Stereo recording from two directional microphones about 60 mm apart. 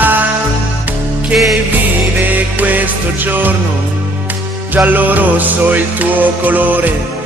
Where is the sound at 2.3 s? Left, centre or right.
Right.